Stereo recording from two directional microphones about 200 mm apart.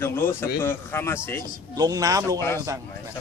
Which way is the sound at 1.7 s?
20° right (ahead or behind).